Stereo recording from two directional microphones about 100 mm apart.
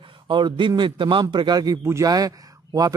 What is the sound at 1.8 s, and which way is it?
Speech, 25° right (ahead or behind).